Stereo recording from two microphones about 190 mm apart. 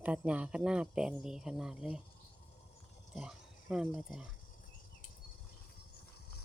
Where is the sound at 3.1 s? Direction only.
5° right (ahead or behind).